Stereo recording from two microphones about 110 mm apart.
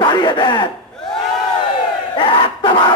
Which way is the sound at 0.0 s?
45° left (ahead or behind).